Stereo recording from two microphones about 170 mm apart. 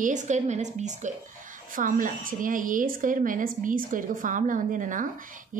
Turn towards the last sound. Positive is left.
turn(degrees=-50)  # may be behind; listen again after turning